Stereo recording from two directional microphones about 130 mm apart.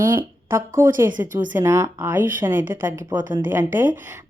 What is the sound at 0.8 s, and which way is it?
Speech, 20° right (ahead or behind).